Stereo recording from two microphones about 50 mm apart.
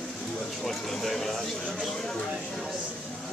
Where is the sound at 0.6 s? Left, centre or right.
Centre.